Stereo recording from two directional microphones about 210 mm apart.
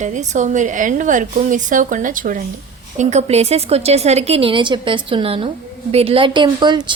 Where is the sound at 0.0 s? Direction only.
35° right (ahead or behind).